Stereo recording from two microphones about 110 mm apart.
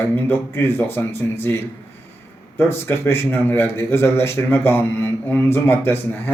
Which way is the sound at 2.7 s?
20° left (ahead or behind).